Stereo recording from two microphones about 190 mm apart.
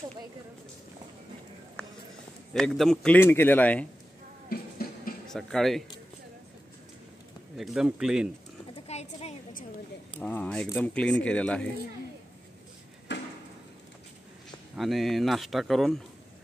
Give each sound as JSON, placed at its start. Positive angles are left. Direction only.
{"t": 1.8, "sound": "clip-clop", "side_deg": 5}
{"t": 2.5, "sound": "a man's voice", "side_deg": 0}
{"t": 4.5, "sound": "music", "side_deg": 50}
{"t": 5.3, "sound": "speech", "side_deg": 0}
{"t": 7.5, "sound": "speech", "side_deg": 0}
{"t": 8.7, "sound": "a sound", "side_deg": 35}
{"t": 10.1, "sound": "speech", "side_deg": 10}
{"t": 14.8, "sound": "speech", "side_deg": 0}